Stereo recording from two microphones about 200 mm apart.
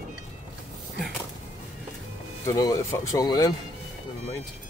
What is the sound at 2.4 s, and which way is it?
Speech, 15° left (ahead or behind).